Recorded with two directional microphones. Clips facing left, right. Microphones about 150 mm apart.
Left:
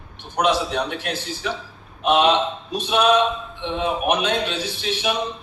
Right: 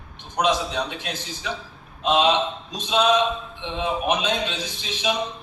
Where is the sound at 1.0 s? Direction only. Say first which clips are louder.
Left 4 dB; 60° left (ahead or behind).